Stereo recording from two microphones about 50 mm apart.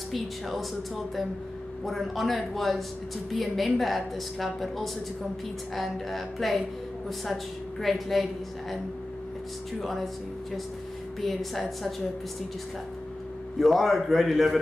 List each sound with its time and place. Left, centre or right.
0.1 s a woman's voice: centre
1.9 s a woman's voice: centre
7.8 s a woman's voice: centre
9.8 s a woman's voice: centre
11.1 s a woman's voice: centre
13.6 s a woman's voice: centre